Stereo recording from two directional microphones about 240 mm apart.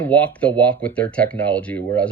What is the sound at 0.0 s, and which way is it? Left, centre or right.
Speech, centre.